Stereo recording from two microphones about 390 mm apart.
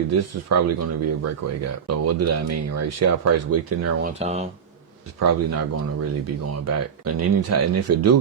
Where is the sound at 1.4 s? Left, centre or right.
Right.